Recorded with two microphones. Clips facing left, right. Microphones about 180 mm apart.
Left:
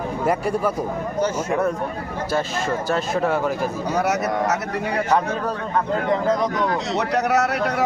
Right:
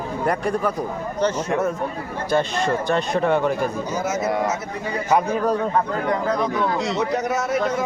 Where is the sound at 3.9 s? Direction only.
70° left (ahead or behind).